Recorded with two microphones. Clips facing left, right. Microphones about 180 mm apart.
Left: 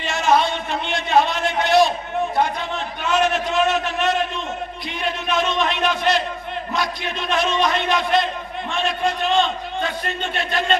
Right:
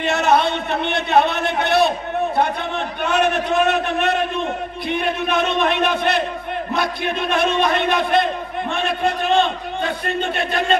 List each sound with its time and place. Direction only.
0.0 s a man's voice: 60° right (ahead or behind)
3.0 s a man's voice: 60° right (ahead or behind)